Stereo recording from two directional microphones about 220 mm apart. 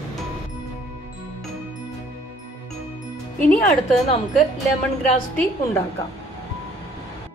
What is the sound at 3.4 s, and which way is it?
Speech, 5° left (ahead or behind).